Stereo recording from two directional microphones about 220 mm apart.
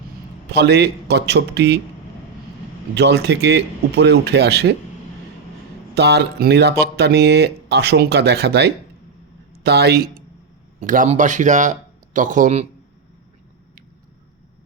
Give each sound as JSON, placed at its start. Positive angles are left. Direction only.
{"t": 0.5, "sound": "speech", "side_deg": -50}
{"t": 2.9, "sound": "speech", "side_deg": -50}
{"t": 5.9, "sound": "speech", "side_deg": -50}
{"t": 10.8, "sound": "speech", "side_deg": -35}